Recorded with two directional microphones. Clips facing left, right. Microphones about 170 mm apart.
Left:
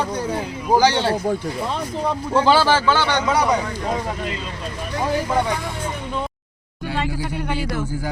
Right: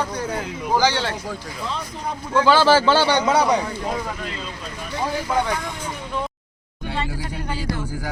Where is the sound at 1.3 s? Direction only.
50° left (ahead or behind).